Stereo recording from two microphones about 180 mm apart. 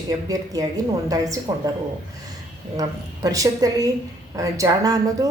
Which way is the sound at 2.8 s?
20° right (ahead or behind).